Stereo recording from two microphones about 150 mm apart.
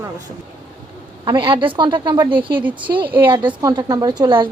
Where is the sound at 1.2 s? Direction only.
30° right (ahead or behind).